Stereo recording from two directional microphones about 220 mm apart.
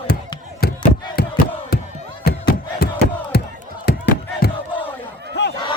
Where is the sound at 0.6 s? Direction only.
45° left (ahead or behind).